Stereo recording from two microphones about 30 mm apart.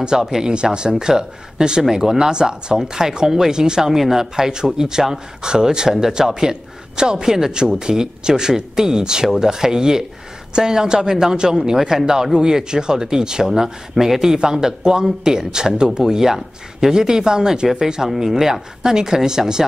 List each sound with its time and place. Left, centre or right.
0.0 s speech: right
1.8 s speech: centre
2.3 s speech: right
2.8 s speech: centre
3.9 s speech: centre